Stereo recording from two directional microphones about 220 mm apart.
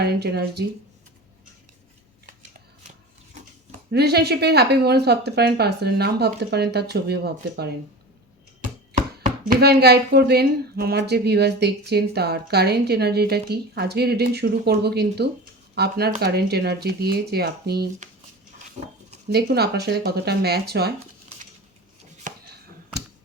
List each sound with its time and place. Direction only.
0.0 s speech: 50° right (ahead or behind)
3.9 s speech: 45° right (ahead or behind)
9.2 s speech: 45° right (ahead or behind)
19.3 s speech: 45° right (ahead or behind)
22.3 s a sound: 35° right (ahead or behind)